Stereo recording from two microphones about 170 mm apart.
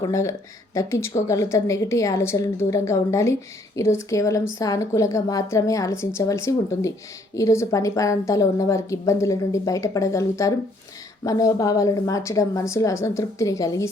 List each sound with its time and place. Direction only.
0.0 s a woman's voice: 20° left (ahead or behind)